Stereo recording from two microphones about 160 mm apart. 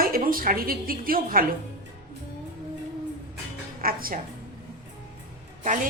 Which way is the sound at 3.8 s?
65° right (ahead or behind).